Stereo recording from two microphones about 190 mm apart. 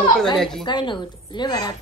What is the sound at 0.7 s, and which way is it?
A woman's voice, 25° left (ahead or behind).